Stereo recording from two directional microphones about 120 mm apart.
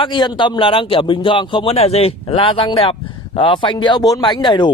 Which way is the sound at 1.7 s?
60° left (ahead or behind).